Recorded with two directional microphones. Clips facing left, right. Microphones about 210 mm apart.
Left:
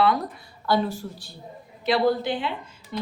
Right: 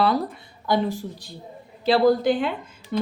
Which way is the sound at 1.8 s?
35° right (ahead or behind).